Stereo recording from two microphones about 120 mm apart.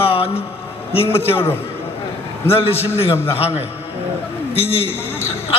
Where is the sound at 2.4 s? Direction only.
55° left (ahead or behind).